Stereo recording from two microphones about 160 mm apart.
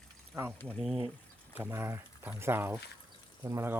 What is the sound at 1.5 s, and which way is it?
Speech, 15° right (ahead or behind).